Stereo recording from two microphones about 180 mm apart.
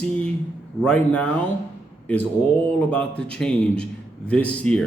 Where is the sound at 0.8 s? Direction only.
5° left (ahead or behind).